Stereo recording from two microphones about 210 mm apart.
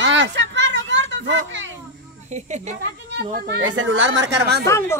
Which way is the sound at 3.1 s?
50° right (ahead or behind).